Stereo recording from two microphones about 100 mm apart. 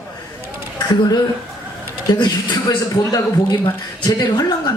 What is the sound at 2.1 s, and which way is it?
Speech, 45° left (ahead or behind).